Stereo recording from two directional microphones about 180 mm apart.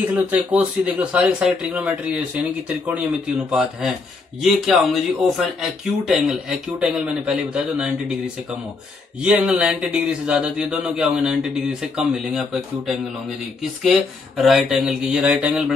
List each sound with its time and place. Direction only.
0.1 s speech: 10° right (ahead or behind)
9.2 s speech: 5° right (ahead or behind)